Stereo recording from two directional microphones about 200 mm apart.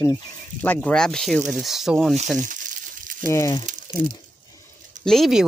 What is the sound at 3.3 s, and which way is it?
Speech, 15° left (ahead or behind).